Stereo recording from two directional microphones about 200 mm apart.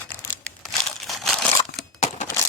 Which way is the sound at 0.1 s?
5° left (ahead or behind).